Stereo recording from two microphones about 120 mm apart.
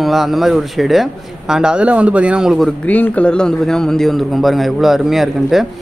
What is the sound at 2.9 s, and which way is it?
Speech, 10° left (ahead or behind).